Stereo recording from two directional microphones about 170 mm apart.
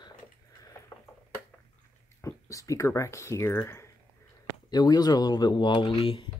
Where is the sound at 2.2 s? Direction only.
20° left (ahead or behind).